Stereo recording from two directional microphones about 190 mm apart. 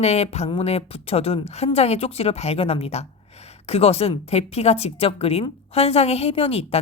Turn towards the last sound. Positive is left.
turn(degrees=30)  # may be behind; listen again after turning